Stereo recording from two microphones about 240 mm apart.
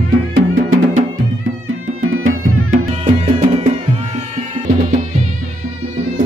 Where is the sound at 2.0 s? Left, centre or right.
Right.